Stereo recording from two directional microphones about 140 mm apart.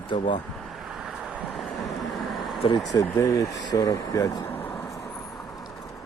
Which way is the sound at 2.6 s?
35° left (ahead or behind).